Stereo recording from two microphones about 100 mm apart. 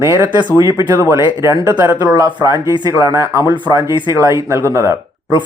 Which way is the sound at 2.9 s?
30° right (ahead or behind).